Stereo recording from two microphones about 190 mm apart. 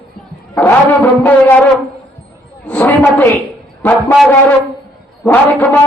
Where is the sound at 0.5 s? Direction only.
10° left (ahead or behind).